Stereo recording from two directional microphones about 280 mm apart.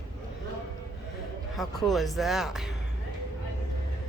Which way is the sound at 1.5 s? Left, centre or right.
Centre.